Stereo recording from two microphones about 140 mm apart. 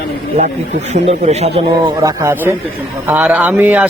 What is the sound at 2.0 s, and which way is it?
A man's voice, 20° right (ahead or behind).